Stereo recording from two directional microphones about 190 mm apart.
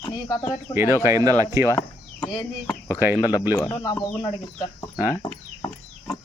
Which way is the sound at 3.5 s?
15° left (ahead or behind).